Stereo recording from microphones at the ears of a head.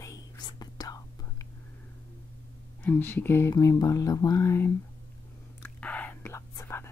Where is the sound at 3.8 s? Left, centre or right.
Left.